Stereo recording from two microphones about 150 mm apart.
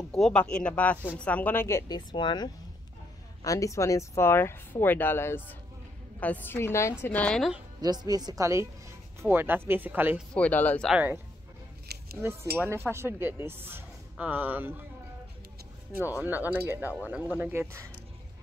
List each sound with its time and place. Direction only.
0.1 s speech: 5° left (ahead or behind)
7.8 s a woman's voice: 25° right (ahead or behind)
10.3 s speech: 10° left (ahead or behind)
10.9 s speech: 10° right (ahead or behind)
12.2 s speech: 15° right (ahead or behind)
16.2 s speech: 10° right (ahead or behind)